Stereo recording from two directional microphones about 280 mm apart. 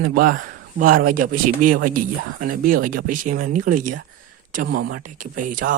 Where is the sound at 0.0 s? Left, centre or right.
Right.